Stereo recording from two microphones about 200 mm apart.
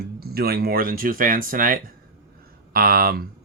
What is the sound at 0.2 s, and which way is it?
Speech, 50° right (ahead or behind).